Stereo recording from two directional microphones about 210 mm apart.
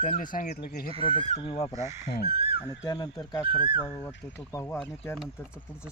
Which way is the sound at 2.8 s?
20° left (ahead or behind).